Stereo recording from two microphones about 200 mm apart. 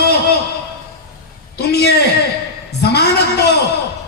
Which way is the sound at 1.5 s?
55° left (ahead or behind).